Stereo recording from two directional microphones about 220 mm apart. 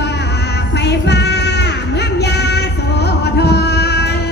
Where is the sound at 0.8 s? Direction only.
50° left (ahead or behind).